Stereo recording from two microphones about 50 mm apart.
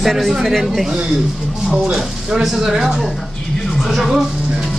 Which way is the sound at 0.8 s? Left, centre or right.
Centre.